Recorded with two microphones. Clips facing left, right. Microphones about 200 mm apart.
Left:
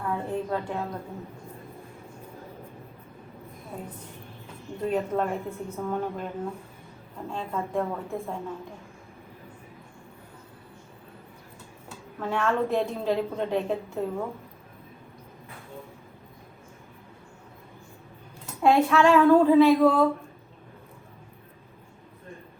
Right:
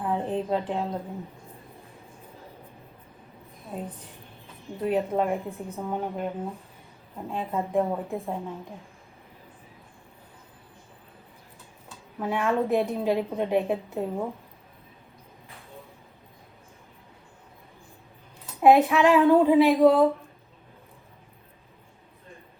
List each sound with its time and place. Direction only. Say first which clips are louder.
0.0 s a sound: right 2 dB; 15° right (ahead or behind)
0.7 s a woman's voice: right 3 dB; 20° right (ahead or behind)
3.7 s a woman's voice: right 3 dB; 20° right (ahead or behind)
11.9 s a sound: right 1 dB; 15° right (ahead or behind)
12.7 s a woman's voice: right 2 dB; 15° right (ahead or behind)
18.6 s a woman's voice: right 2 dB; 15° right (ahead or behind)